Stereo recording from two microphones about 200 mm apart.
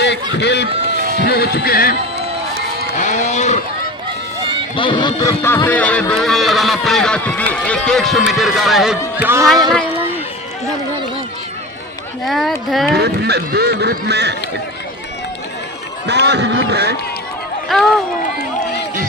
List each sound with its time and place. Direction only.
0.0 s speech: 60° left (ahead or behind)
0.9 s run: 40° right (ahead or behind)
1.2 s speech: 50° left (ahead or behind)
2.9 s music: 40° left (ahead or behind)
4.8 s speech: 25° left (ahead or behind); by 9.4 s 10° right (ahead or behind)
12.2 s speech: centre (ahead or behind)
12.9 s speech: 55° right (ahead or behind)
16.0 s speech: 55° right (ahead or behind)
17.7 s speech: centre (ahead or behind)
18.2 s speech: 55° left (ahead or behind)